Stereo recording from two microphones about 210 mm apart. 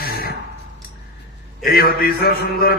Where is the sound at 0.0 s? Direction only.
45° left (ahead or behind).